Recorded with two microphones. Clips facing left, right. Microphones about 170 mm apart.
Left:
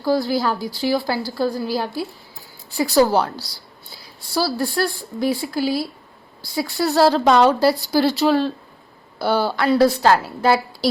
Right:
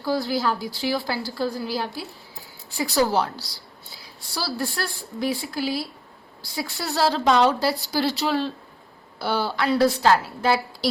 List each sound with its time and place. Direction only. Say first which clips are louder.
0.0 s a woman's voice: left 4 dB; 35° left (ahead or behind)
4.4 s a woman's voice: left 7 dB; 35° left (ahead or behind)